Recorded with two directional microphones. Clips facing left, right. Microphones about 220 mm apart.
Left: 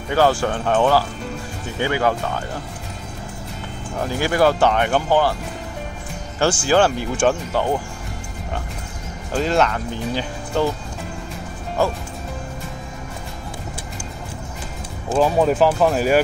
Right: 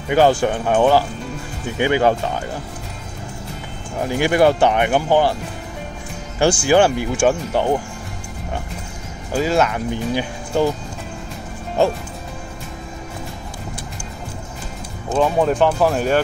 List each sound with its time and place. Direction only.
0.1 s speech: 20° right (ahead or behind)
4.0 s speech: 20° right (ahead or behind)
6.4 s speech: 15° right (ahead or behind)
9.3 s speech: 5° right (ahead or behind)
15.0 s speech: 5° left (ahead or behind)